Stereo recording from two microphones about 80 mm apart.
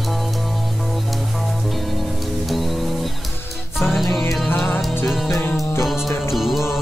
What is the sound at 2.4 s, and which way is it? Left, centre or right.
Music, centre.